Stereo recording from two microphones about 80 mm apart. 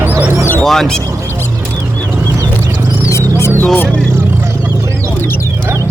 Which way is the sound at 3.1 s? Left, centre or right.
Left.